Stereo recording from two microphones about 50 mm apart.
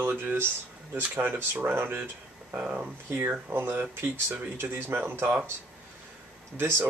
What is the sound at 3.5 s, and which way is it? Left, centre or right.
Speech, right.